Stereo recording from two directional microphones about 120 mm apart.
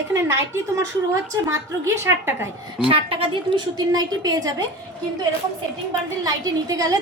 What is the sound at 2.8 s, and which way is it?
Speech, 50° right (ahead or behind).